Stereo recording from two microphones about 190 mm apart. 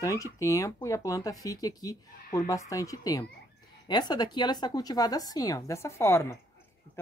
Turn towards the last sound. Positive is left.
turn(degrees=15)  # may be behind; listen again after turning